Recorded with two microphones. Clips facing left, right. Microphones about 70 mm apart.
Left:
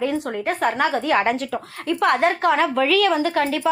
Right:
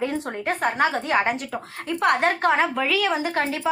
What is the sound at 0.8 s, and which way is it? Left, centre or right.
Speech, right.